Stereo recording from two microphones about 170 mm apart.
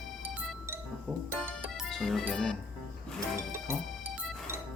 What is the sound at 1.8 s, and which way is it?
Music, centre (ahead or behind).